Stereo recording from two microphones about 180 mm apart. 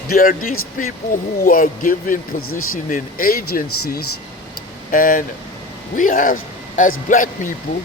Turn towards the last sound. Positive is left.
turn(degrees=45)  # may be behind; listen again after turning